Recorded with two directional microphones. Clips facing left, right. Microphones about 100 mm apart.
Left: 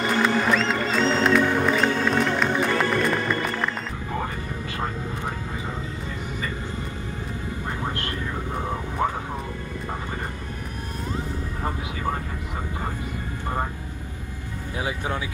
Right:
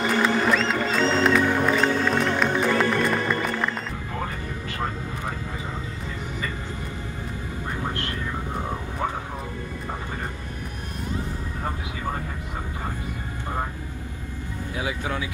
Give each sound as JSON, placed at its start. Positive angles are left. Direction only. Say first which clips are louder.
{"t": 0.2, "sound": "music", "louder": "left 1 dB", "side_deg": 0}
{"t": 14.8, "sound": "music", "louder": "left 1 dB", "side_deg": 30}